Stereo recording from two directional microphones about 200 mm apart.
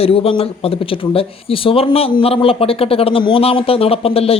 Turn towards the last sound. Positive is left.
turn(degrees=30)  # may be behind; listen again after turning